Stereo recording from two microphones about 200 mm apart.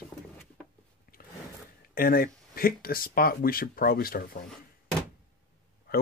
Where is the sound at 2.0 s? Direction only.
45° left (ahead or behind).